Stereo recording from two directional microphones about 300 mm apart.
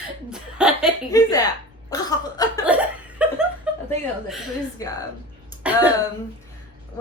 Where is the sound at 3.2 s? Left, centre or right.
Centre.